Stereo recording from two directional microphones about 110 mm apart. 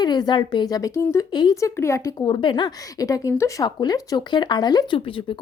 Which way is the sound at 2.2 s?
45° left (ahead or behind).